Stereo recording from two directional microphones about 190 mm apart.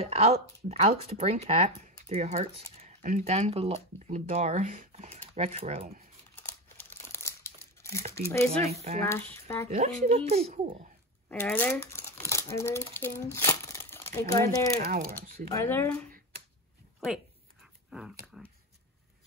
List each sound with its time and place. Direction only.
0.0 s speech: 35° right (ahead or behind)
6.3 s crumpling: 10° left (ahead or behind)
8.1 s speech: 15° left (ahead or behind)
8.7 s speech: 35° right (ahead or behind)
9.0 s speech: 15° left (ahead or behind)
9.7 s speech: 35° right (ahead or behind)
11.2 s speech: 10° left (ahead or behind)
14.9 s speech: 45° right (ahead or behind)
15.5 s speech: 10° left (ahead or behind)
17.8 s dog: centre (ahead or behind)